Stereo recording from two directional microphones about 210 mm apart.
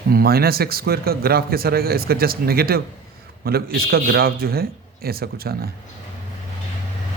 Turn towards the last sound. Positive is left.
turn(degrees=-45)  # may be behind; listen again after turning